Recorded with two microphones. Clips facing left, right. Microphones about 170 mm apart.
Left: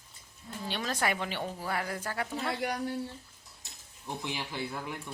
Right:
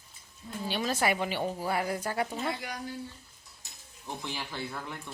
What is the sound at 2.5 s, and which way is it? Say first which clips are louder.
Speech: left 3 dB; 65° left (ahead or behind).